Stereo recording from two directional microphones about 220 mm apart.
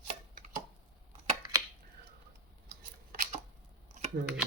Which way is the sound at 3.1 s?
40° right (ahead or behind).